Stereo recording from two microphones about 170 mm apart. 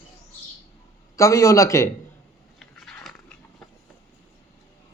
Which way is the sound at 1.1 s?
20° left (ahead or behind).